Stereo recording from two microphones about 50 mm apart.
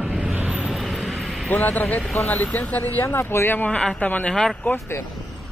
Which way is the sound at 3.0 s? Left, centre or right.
Left.